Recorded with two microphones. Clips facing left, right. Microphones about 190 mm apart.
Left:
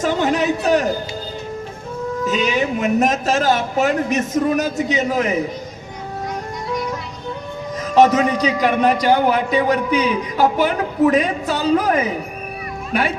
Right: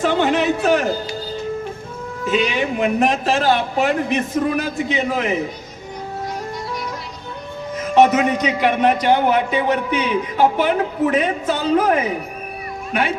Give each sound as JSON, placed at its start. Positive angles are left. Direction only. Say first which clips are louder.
{"t": 0.0, "sound": "a sound", "louder": "right 1 dB", "side_deg": 40}
{"t": 2.2, "sound": "speech", "louder": "right 1 dB", "side_deg": 40}
{"t": 7.8, "sound": "a man's voice", "louder": "even", "side_deg": 40}